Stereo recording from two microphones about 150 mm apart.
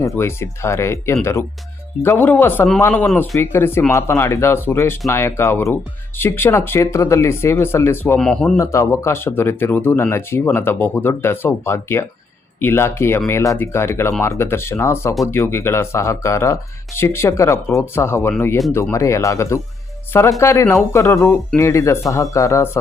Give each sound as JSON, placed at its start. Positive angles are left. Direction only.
{"t": 0.0, "sound": "speech", "side_deg": 15}
{"t": 8.2, "sound": "speech", "side_deg": 5}
{"t": 8.5, "sound": "speech", "side_deg": 20}